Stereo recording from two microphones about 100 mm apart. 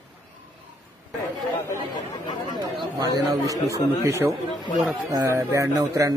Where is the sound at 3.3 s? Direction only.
35° right (ahead or behind).